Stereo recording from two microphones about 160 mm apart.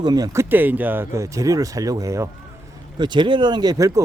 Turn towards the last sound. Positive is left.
turn(degrees=-20)  # may be behind; listen again after turning